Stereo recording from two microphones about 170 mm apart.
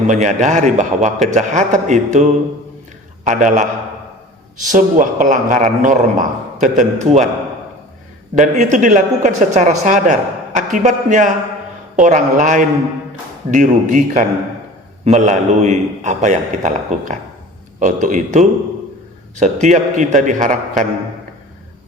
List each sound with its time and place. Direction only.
0.1 s speech: 45° right (ahead or behind)
4.7 s speech: 50° right (ahead or behind)
8.4 s speech: 45° right (ahead or behind)